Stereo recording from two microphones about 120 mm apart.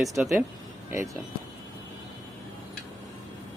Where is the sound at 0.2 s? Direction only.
5° right (ahead or behind).